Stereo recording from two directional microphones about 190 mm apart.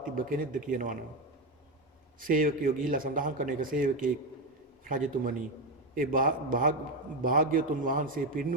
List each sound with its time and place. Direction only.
0.0 s a man's voice: 45° right (ahead or behind)
2.2 s a man's voice: 45° right (ahead or behind)